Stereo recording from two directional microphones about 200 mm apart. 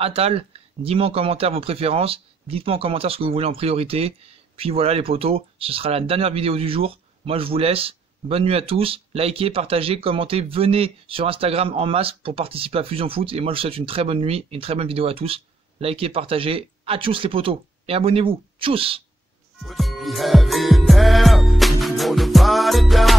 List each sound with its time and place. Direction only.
0.0 s speech: 30° right (ahead or behind)
19.6 s music: centre (ahead or behind)